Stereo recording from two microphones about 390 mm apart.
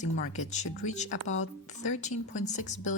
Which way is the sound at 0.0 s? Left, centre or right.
Centre.